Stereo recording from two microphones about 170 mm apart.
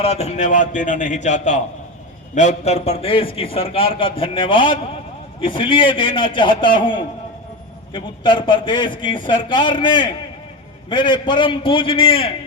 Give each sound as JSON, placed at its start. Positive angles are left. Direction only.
{"t": 0.0, "sound": "a man's voice", "side_deg": 40}